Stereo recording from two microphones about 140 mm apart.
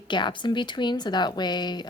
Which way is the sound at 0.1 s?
35° left (ahead or behind).